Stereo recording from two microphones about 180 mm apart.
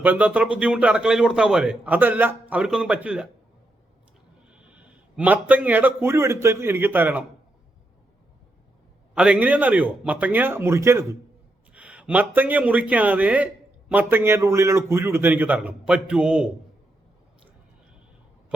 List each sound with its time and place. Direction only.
0.0 s a man's voice: 10° right (ahead or behind)
4.4 s a man's voice: 5° right (ahead or behind)
9.1 s a man's voice: 5° right (ahead or behind)